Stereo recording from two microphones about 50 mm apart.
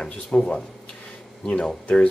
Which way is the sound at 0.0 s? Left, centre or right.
Centre.